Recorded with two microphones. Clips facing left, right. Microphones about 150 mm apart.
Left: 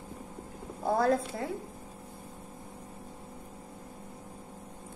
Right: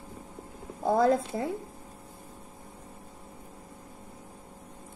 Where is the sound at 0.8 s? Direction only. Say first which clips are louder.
Right 3 dB; 20° right (ahead or behind).